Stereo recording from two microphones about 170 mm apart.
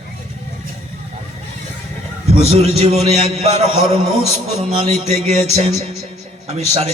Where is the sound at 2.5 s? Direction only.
40° right (ahead or behind).